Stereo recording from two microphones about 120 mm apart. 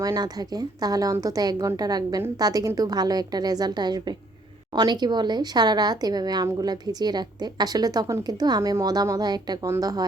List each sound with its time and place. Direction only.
0.0 s speech: 30° right (ahead or behind)